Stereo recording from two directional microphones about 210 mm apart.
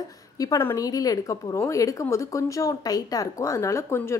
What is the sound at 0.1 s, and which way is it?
A woman's voice, 15° left (ahead or behind).